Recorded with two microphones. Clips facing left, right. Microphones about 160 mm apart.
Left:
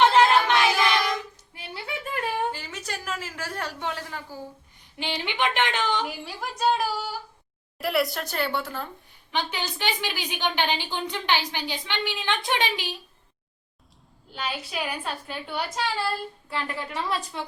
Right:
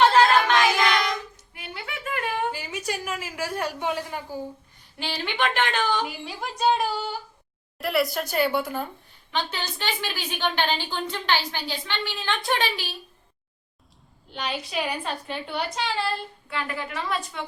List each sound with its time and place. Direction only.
0.0 s child singing: 20° left (ahead or behind)
1.5 s a sound: 35° left (ahead or behind)
2.5 s a sound: 10° right (ahead or behind)
4.9 s a woman's voice: 20° left (ahead or behind)
6.2 s a woman's voice: centre (ahead or behind)
9.3 s a woman's voice: 15° left (ahead or behind)
14.3 s a woman's voice: 5° left (ahead or behind)
16.5 s a woman's voice: 30° left (ahead or behind)